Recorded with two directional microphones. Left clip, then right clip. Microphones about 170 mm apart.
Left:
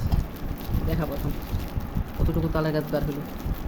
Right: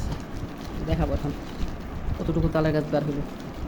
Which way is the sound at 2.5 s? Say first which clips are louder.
Right 3 dB; 10° right (ahead or behind).